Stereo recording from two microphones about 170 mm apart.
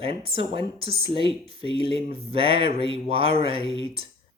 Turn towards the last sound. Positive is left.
turn(degrees=-35)  # may be behind; listen again after turning